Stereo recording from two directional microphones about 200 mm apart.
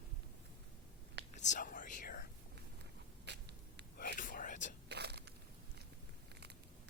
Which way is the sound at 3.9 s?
40° left (ahead or behind).